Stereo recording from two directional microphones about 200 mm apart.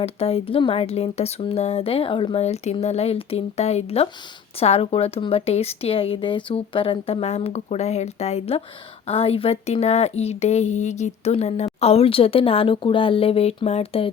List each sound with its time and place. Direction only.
0.0 s speech: 30° left (ahead or behind)